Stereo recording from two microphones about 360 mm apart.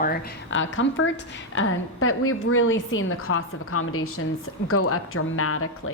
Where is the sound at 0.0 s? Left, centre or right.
Left.